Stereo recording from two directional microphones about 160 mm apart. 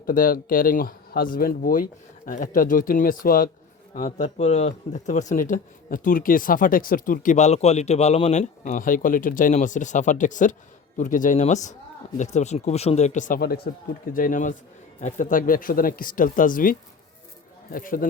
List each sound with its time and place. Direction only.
0.0 s speech: 60° left (ahead or behind)
3.9 s speech: 45° left (ahead or behind); by 18.1 s 60° left (ahead or behind)